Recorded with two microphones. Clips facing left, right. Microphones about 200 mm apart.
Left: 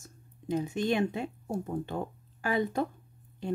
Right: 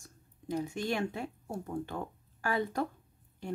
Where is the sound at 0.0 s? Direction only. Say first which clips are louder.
Left 3 dB; 20° left (ahead or behind).